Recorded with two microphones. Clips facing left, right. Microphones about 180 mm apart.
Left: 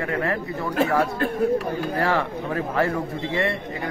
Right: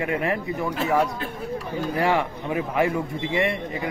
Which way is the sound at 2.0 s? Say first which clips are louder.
Right 2 dB; 15° right (ahead or behind).